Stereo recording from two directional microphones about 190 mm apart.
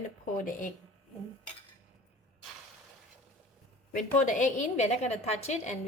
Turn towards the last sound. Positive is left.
turn(degrees=35)  # may be behind; listen again after turning